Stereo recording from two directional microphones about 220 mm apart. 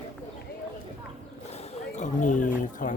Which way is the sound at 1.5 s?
30° left (ahead or behind).